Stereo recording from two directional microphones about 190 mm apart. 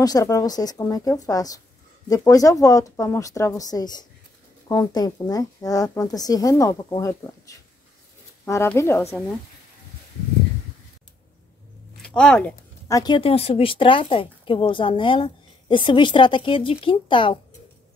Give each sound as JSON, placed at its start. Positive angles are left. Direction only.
{"t": 0.0, "sound": "speech", "side_deg": 20}
{"t": 12.0, "sound": "speech", "side_deg": 5}